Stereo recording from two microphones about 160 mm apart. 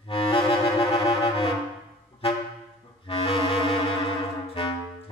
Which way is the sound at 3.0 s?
35° left (ahead or behind).